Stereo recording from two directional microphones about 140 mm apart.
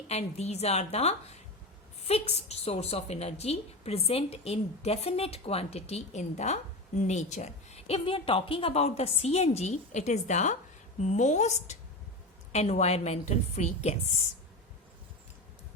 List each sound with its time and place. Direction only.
0.1 s a woman's voice: 50° left (ahead or behind)